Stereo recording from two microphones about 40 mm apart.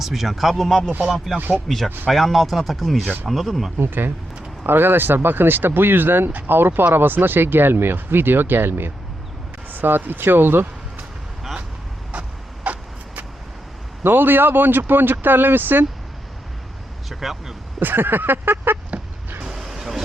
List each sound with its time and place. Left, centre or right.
0.0 s speech: centre
3.8 s speech: right
9.7 s speech: right
12.1 s vehicle: right
14.0 s speech: right
17.1 s speech: centre
17.7 s speech: right
19.5 s vehicle: centre